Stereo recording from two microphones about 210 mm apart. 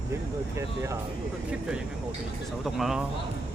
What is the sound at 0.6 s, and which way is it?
Speech, 15° right (ahead or behind).